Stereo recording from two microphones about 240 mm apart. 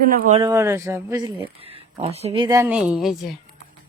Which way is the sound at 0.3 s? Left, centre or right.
Centre.